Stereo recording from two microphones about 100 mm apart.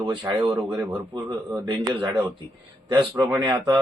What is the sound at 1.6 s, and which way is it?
Speech, 50° right (ahead or behind).